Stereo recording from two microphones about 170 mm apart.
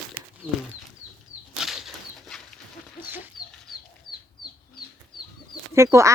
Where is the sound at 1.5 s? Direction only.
Centre (ahead or behind).